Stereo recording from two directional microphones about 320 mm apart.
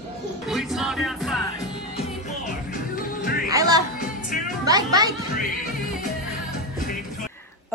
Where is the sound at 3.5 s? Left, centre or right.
Centre.